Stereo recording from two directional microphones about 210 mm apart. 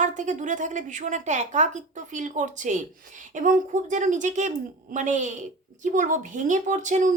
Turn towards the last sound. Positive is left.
turn(degrees=-35)  # may be behind; listen again after turning